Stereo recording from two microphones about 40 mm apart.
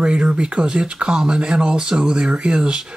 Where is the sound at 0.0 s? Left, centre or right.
Right.